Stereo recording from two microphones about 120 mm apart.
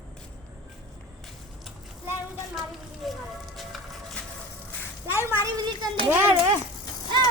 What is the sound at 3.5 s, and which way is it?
Music, centre (ahead or behind).